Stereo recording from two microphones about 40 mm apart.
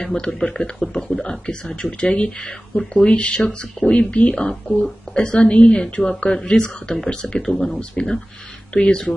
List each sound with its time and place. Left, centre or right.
0.0 s a man's voice: left
7.4 s speech: centre
8.7 s speech: left